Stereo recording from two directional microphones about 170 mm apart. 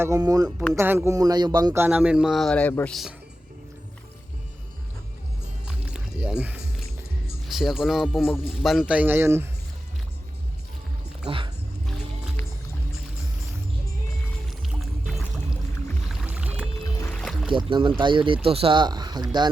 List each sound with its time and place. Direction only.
0.0 s speech: 20° right (ahead or behind)
1.8 s speech: 10° right (ahead or behind)
5.6 s music: 5° right (ahead or behind)
7.4 s a man's voice: centre (ahead or behind)
11.3 s dog: 30° right (ahead or behind)
16.0 s music: 5° right (ahead or behind)
17.1 s music: 5° left (ahead or behind)
17.5 s speech: 30° right (ahead or behind)